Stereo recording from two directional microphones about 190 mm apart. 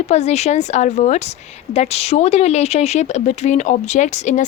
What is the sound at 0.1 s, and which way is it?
A woman's voice, 35° left (ahead or behind).